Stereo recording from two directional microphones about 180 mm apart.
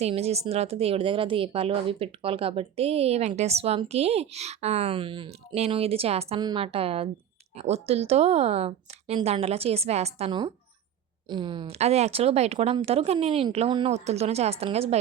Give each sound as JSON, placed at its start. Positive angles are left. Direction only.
{"t": 0.0, "sound": "speech", "side_deg": -35}